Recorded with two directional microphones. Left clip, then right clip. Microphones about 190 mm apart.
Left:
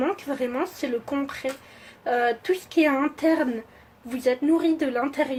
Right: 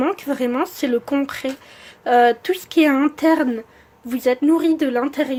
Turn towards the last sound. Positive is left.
turn(degrees=-30)  # may be behind; listen again after turning